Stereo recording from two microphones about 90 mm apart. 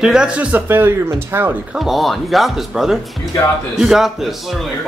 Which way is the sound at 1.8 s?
Centre (ahead or behind).